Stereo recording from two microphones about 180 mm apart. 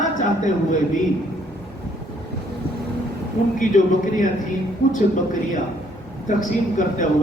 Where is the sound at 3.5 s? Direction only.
45° left (ahead or behind).